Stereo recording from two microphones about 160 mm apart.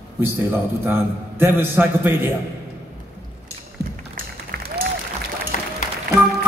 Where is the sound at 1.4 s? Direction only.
15° right (ahead or behind).